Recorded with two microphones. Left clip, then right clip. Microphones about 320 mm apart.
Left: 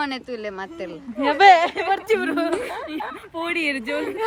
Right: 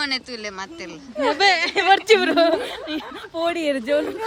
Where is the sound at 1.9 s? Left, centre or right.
Right.